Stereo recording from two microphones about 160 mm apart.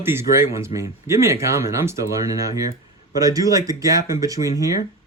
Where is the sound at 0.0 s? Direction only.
15° right (ahead or behind).